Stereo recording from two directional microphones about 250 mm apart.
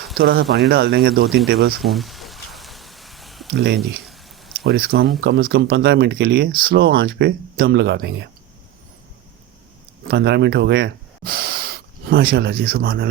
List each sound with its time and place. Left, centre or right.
0.1 s speech: right
1.8 s a sound: centre
4.6 s speech: right
10.1 s speech: right